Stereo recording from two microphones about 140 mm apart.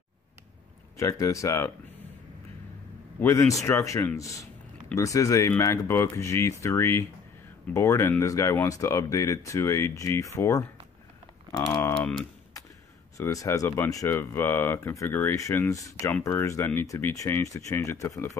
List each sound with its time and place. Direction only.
0.9 s speech: 25° left (ahead or behind)
3.2 s speech: 20° left (ahead or behind)
13.2 s speech: 20° left (ahead or behind)